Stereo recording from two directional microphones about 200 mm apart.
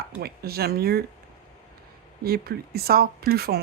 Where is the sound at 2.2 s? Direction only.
50° right (ahead or behind).